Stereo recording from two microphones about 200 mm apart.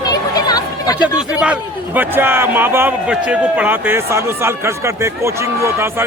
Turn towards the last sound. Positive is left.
turn(degrees=-15)  # may be behind; listen again after turning